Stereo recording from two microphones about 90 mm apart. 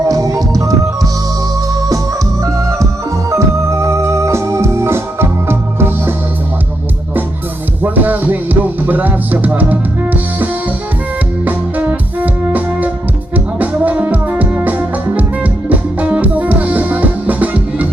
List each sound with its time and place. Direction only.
0.1 s music: 40° right (ahead or behind)
2.4 s music: 35° right (ahead or behind)
3.2 s organ: 35° right (ahead or behind)
7.8 s music: 20° right (ahead or behind)